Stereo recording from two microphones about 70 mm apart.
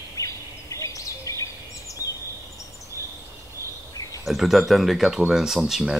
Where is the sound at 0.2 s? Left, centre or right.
Left.